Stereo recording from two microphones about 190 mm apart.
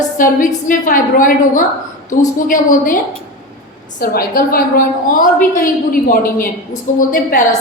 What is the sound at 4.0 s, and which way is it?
A woman's voice, 50° left (ahead or behind).